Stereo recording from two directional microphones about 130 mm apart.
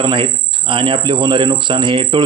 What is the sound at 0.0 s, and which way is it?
A man's voice, 35° right (ahead or behind).